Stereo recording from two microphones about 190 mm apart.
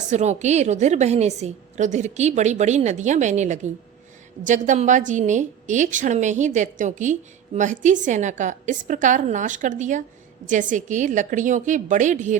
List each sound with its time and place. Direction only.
0.1 s a woman's voice: 40° right (ahead or behind)